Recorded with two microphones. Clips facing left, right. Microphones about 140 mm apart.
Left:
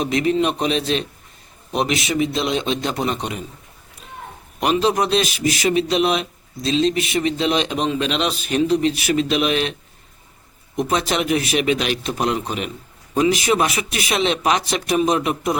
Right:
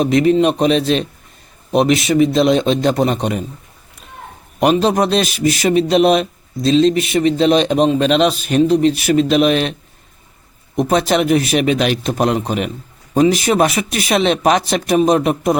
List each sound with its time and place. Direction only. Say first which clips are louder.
0.0 s a man's voice: right 6 dB; 40° right (ahead or behind)
4.6 s a man's voice: right 5 dB; 40° right (ahead or behind)
10.8 s a man's voice: right 6 dB; 40° right (ahead or behind)